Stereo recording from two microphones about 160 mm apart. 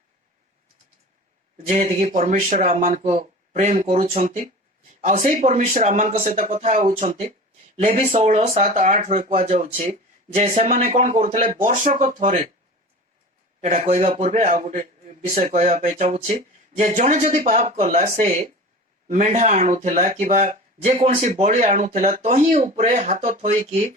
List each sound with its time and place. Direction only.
1.5 s speech: 45° right (ahead or behind)
13.6 s speech: 50° right (ahead or behind)